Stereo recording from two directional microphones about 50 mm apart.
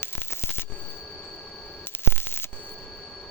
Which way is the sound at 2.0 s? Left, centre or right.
Left.